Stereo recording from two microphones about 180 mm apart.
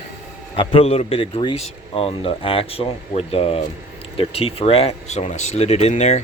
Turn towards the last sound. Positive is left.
turn(degrees=35)  # may be behind; listen again after turning